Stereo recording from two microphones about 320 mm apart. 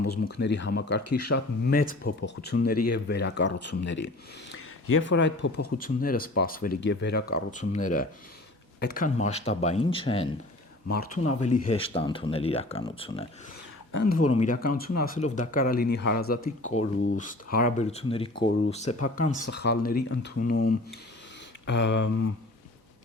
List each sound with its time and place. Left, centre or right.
0.1 s speech: left
10.8 s speech: left
14.3 s speech: left